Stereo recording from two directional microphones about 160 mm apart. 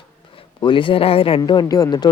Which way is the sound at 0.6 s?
30° left (ahead or behind).